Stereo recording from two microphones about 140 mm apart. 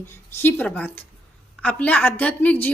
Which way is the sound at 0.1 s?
15° left (ahead or behind).